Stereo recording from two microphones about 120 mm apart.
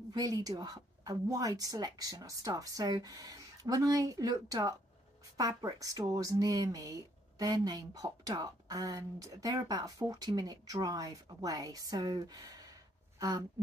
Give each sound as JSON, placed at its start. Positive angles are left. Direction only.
{"t": 0.1, "sound": "speech", "side_deg": -30}